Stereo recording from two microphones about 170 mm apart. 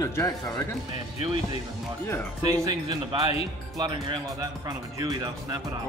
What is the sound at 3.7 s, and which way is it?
Speech, 25° right (ahead or behind).